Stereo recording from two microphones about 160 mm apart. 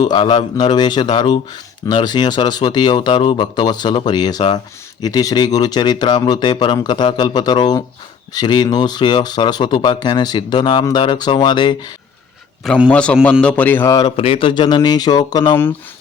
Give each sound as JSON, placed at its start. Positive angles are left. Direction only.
{"t": 0.0, "sound": "speech", "side_deg": 30}
{"t": 12.6, "sound": "a man's voice", "side_deg": -5}
{"t": 12.9, "sound": "speech", "side_deg": 5}
{"t": 14.0, "sound": "speech", "side_deg": 35}